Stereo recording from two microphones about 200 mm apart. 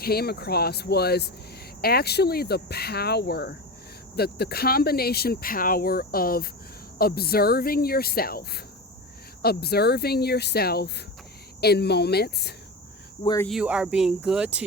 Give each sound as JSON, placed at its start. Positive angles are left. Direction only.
{"t": 0.0, "sound": "speech", "side_deg": 50}
{"t": 13.2, "sound": "speech", "side_deg": 15}
{"t": 13.5, "sound": "speech", "side_deg": -5}